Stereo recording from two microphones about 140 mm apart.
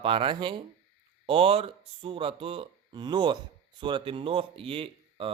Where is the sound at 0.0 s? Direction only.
40° right (ahead or behind).